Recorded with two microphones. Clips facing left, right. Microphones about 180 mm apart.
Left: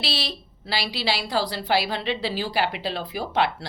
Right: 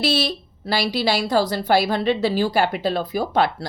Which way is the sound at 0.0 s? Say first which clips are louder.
Right 9 dB; 45° right (ahead or behind).